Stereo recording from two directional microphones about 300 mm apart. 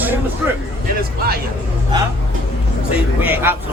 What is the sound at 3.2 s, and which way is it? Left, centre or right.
Speech, centre.